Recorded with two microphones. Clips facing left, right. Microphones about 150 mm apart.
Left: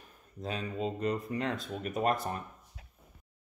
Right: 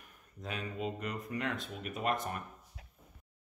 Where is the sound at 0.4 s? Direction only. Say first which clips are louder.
Left 4 dB; 30° left (ahead or behind).